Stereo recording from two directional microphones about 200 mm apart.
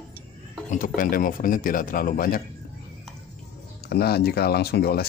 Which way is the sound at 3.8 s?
55° left (ahead or behind).